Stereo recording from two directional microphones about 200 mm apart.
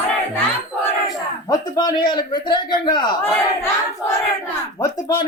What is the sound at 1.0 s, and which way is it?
Speech, 20° left (ahead or behind).